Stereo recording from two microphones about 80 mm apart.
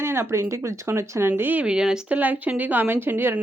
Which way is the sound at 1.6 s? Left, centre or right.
Centre.